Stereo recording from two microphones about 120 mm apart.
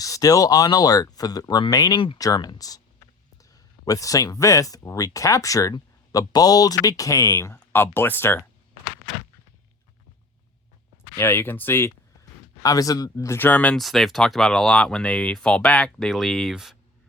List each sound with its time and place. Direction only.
0.0 s speech: 30° left (ahead or behind)
11.2 s speech: 20° left (ahead or behind)
12.6 s speech: 30° left (ahead or behind); by 16.7 s centre (ahead or behind)